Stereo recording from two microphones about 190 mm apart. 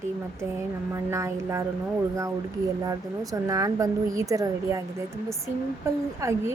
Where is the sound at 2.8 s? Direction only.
20° right (ahead or behind).